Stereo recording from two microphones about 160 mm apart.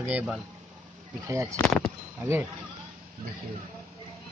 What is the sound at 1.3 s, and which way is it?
Speech, 20° right (ahead or behind).